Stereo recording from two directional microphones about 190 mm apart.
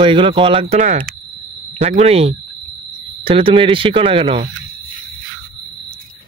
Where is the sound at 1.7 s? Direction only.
40° right (ahead or behind).